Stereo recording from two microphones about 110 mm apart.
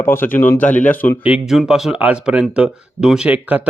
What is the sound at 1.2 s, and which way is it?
Speech, 10° right (ahead or behind).